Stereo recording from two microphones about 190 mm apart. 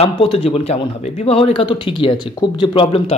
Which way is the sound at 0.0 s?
30° left (ahead or behind).